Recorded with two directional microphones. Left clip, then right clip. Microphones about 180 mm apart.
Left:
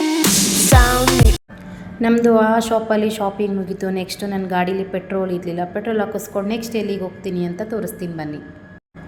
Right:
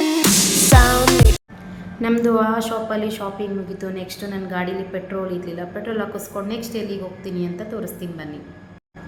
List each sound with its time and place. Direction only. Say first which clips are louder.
0.2 s music: even; centre (ahead or behind)
2.0 s a woman's voice: left 4 dB; 15° left (ahead or behind)